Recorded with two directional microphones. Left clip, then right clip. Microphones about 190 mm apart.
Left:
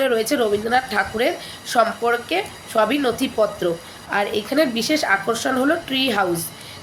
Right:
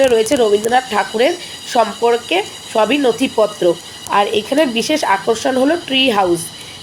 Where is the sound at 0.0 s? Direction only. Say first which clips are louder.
Right 7 dB; 15° right (ahead or behind).